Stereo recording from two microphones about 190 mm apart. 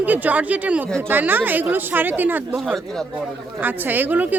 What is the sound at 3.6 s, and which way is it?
Speech, 10° right (ahead or behind).